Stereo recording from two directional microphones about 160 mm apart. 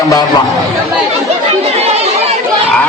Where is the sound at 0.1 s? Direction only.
25° left (ahead or behind).